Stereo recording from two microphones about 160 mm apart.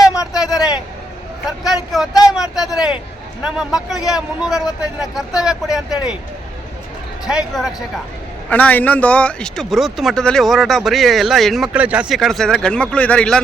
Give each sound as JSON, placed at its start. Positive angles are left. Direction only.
{"t": 0.3, "sound": "a sound", "side_deg": -5}
{"t": 1.5, "sound": "vehicle", "side_deg": -5}
{"t": 2.3, "sound": "a sound", "side_deg": -5}
{"t": 3.6, "sound": "speech", "side_deg": -5}
{"t": 7.3, "sound": "speech", "side_deg": -5}
{"t": 8.4, "sound": "speech", "side_deg": 10}